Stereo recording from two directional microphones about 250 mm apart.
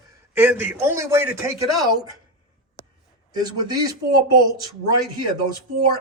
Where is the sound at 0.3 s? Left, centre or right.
Centre.